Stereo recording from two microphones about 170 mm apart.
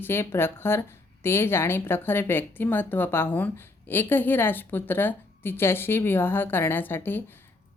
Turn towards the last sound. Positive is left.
turn(degrees=10)  # may be behind; listen again after turning